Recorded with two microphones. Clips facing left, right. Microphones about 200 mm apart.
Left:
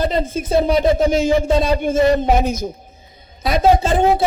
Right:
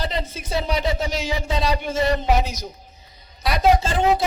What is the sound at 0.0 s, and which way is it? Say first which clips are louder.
A woman's voice: left 8 dB; 50° left (ahead or behind).